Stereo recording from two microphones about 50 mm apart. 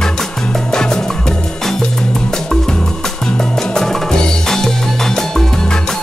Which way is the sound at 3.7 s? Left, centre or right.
Centre.